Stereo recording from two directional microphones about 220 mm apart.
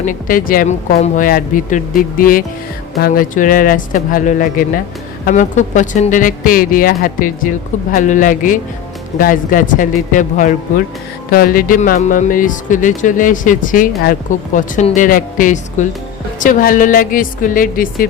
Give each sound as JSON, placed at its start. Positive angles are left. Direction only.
{"t": 0.0, "sound": "speech", "side_deg": 35}